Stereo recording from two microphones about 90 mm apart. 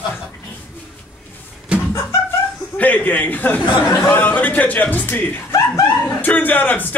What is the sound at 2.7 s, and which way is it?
Speech, 15° left (ahead or behind).